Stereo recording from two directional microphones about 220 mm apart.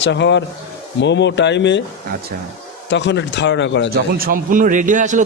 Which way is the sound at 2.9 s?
55° left (ahead or behind).